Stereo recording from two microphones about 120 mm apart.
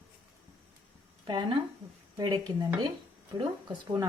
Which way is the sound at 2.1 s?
30° right (ahead or behind).